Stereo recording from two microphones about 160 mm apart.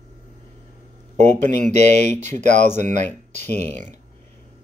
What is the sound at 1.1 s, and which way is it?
Speech, 45° right (ahead or behind).